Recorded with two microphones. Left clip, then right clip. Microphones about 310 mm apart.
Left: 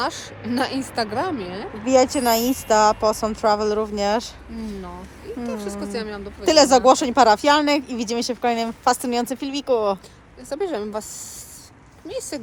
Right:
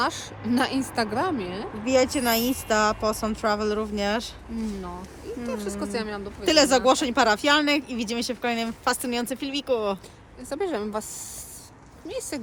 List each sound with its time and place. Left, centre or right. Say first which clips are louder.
0.0 s a woman's voice: left 1 dB; centre
1.8 s speech: left 5 dB; centre
4.5 s a woman's voice: right 1 dB; centre
5.5 s speech: left 1 dB; right
6.4 s speech: left 5 dB; centre
10.5 s a woman's voice: left 3 dB; centre
12.0 s a woman's voice: left 3 dB; centre